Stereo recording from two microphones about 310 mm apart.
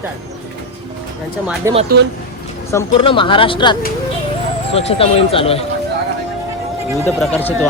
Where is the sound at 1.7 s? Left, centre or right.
Centre.